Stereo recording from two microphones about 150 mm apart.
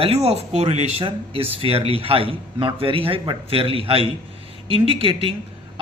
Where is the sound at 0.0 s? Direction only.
40° right (ahead or behind).